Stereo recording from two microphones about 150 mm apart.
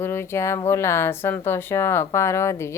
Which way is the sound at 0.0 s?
15° left (ahead or behind).